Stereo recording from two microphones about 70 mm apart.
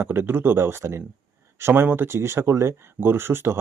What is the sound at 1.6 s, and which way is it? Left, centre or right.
Speech, right.